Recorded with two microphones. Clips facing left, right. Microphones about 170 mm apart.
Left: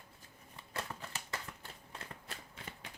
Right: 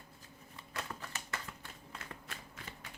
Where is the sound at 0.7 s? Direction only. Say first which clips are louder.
Left 1 dB; 30° left (ahead or behind).